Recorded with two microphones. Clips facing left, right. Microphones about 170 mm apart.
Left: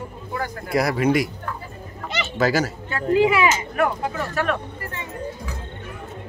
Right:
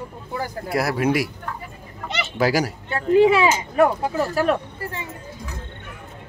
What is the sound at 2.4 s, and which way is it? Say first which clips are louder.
Speech: even; 10° right (ahead or behind).